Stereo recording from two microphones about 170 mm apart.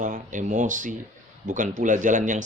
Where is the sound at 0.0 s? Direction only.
50° right (ahead or behind).